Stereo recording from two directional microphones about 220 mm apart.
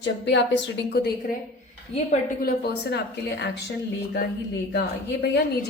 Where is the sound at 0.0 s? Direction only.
55° left (ahead or behind).